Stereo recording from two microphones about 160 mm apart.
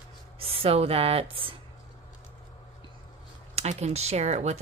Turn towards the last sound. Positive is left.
turn(degrees=-45)  # may be behind; listen again after turning